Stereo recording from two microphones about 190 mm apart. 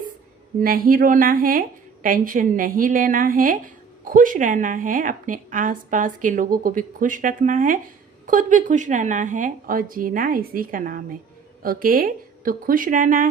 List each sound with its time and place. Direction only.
0.6 s a woman's voice: 50° right (ahead or behind)